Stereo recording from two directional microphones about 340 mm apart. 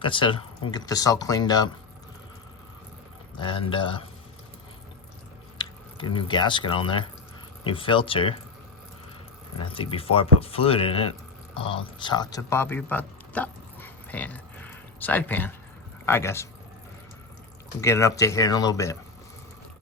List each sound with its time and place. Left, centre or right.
0.0 s speech: centre
3.3 s speech: centre
5.5 s speech: centre
9.6 s speech: centre
17.7 s speech: centre